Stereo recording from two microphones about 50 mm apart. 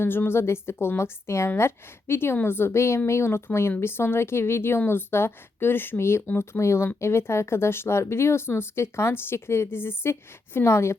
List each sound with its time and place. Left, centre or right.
0.0 s a woman's voice: left
6.6 s speech: left